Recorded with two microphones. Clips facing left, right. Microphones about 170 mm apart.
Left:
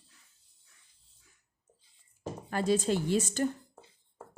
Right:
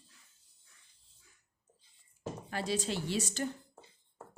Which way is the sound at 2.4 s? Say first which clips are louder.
Left 7 dB; 50° left (ahead or behind).